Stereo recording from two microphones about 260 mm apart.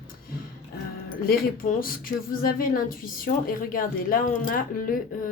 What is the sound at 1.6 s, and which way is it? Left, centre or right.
Speech, left.